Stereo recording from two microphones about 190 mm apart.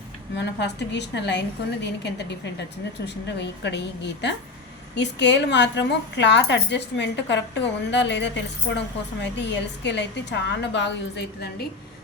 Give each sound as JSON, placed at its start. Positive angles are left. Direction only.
{"t": 0.3, "sound": "a woman's voice", "side_deg": 65}